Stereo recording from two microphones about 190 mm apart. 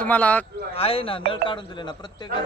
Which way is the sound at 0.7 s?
30° left (ahead or behind).